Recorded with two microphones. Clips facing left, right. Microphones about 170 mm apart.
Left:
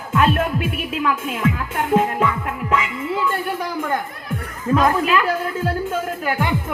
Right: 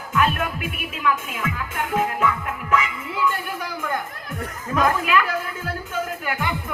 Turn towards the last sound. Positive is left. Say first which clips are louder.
# left 5 dB
turn(degrees=30)  # may be behind; listen again after turning